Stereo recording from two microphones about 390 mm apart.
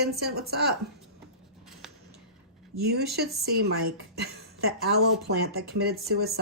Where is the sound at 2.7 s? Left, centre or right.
Right.